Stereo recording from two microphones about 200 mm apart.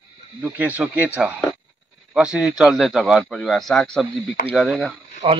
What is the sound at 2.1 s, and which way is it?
Speech, 5° right (ahead or behind).